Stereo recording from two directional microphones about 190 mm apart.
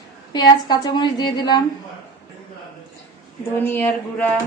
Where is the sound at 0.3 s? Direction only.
20° left (ahead or behind).